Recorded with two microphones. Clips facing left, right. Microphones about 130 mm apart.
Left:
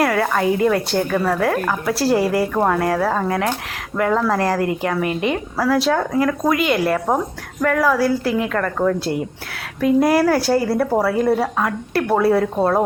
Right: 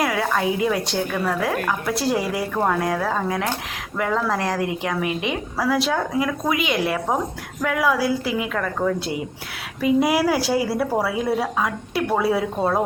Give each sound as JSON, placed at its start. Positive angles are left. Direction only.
{"t": 0.0, "sound": "speech", "side_deg": 0}